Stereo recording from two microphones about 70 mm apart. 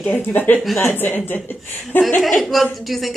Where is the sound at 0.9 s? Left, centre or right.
Left.